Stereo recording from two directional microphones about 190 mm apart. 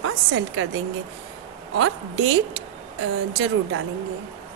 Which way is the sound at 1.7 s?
90° right.